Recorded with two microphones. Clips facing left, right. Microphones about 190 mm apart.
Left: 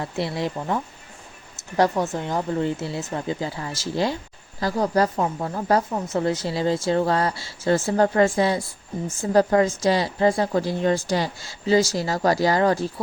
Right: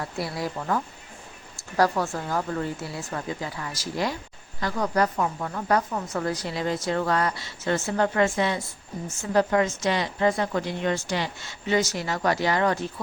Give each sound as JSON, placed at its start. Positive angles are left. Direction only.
{"t": 0.0, "sound": "speech", "side_deg": 25}